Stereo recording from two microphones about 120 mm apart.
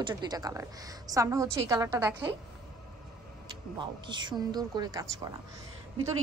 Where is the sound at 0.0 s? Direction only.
35° right (ahead or behind).